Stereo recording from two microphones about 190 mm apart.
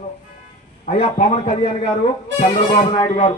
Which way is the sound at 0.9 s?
35° left (ahead or behind).